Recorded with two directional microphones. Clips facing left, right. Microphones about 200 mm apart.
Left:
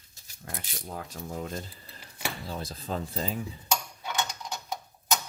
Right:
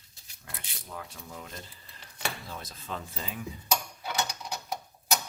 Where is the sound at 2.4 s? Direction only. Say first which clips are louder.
Left 5 dB; 30° left (ahead or behind).